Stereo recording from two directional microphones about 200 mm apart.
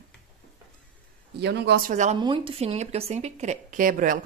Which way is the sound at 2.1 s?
25° right (ahead or behind).